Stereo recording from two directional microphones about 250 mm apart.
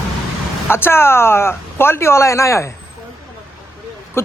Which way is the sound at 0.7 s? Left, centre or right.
Centre.